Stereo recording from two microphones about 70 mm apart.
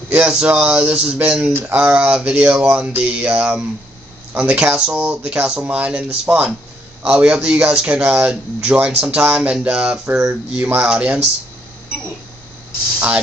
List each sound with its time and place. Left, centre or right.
0.1 s speech: centre